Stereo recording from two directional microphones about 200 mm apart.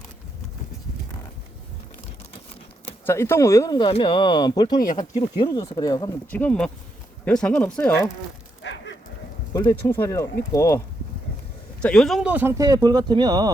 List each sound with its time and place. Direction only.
3.1 s speech: 10° left (ahead or behind)
6.3 s speech: 5° left (ahead or behind)
8.6 s dog: 65° left (ahead or behind)
9.5 s speech: 15° left (ahead or behind); by 13.5 s 20° right (ahead or behind)